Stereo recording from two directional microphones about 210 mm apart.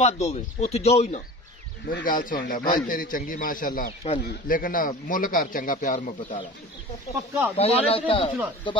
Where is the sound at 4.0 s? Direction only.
30° left (ahead or behind).